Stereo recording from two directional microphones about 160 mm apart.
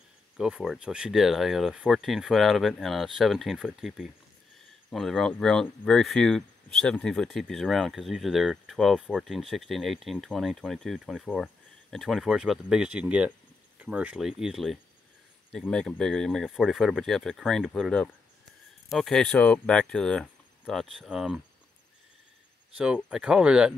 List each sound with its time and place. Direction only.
0.4 s speech: 5° right (ahead or behind)
22.8 s speech: 5° right (ahead or behind)